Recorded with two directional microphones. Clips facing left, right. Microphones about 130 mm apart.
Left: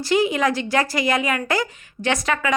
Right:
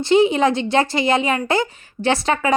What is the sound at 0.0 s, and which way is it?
A woman's voice, 25° right (ahead or behind).